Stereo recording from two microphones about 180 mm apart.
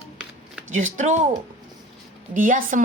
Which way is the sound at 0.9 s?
45° right (ahead or behind).